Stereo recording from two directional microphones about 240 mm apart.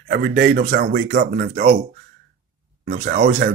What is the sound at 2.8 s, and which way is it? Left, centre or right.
Speech, right.